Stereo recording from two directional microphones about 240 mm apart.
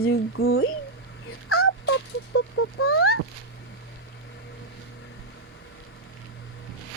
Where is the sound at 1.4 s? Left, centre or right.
Left.